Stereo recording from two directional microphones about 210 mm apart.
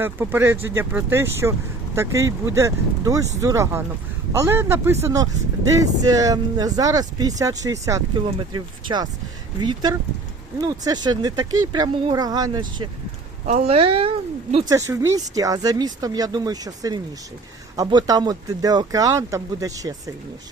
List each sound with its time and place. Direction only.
0.0 s speech: 10° right (ahead or behind)
13.4 s speech: 30° right (ahead or behind)